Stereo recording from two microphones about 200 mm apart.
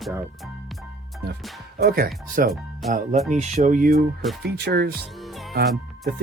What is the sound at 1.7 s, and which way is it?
Speech, 50° right (ahead or behind).